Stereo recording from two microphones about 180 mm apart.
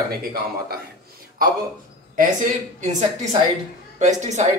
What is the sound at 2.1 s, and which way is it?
Speech, 50° right (ahead or behind).